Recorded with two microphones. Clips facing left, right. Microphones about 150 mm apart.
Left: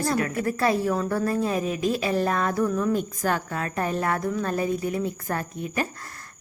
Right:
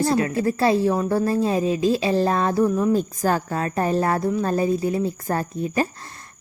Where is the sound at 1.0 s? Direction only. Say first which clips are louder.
Right 4 dB; 30° right (ahead or behind).